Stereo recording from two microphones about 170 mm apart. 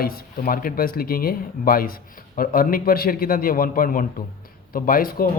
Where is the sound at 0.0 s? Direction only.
60° left (ahead or behind).